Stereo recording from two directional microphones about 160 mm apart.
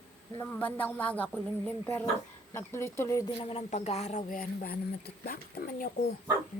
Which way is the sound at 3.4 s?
35° left (ahead or behind).